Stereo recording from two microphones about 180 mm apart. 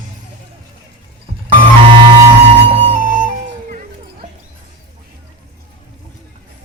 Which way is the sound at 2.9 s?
50° right (ahead or behind).